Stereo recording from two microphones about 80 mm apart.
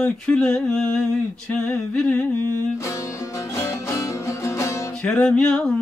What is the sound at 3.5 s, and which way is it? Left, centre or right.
Music, left.